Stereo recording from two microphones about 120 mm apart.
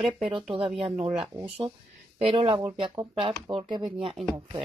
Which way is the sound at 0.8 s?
45° right (ahead or behind).